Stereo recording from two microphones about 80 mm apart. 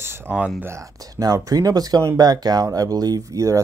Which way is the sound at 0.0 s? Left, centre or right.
Right.